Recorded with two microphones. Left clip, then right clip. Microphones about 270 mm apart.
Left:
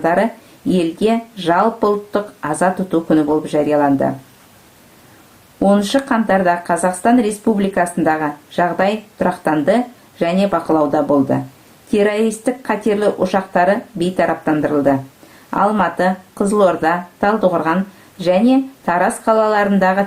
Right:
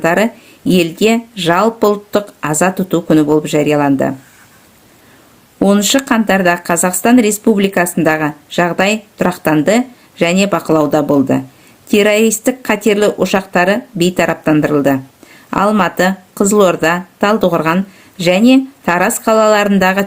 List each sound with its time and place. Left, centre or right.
0.7 s speech: right
5.6 s speech: right